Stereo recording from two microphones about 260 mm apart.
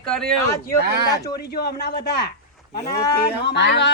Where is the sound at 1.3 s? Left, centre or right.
Left.